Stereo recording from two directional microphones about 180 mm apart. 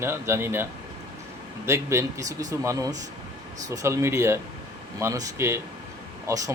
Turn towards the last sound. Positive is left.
turn(degrees=-20)  # may be behind; listen again after turning